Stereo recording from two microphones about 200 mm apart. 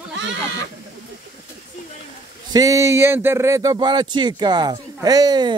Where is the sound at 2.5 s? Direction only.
15° right (ahead or behind).